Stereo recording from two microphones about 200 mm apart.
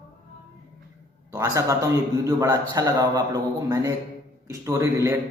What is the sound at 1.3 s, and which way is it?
A man's voice, 15° right (ahead or behind).